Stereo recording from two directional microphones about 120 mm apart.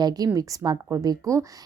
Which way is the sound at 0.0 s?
30° right (ahead or behind).